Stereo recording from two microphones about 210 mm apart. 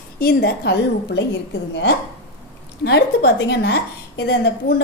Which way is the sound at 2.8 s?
50° left (ahead or behind).